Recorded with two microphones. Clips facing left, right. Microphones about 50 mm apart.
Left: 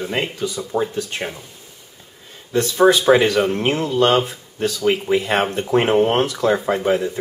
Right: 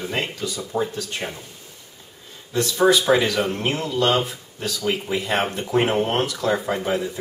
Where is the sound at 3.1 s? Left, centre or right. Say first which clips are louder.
Left 4 dB; left.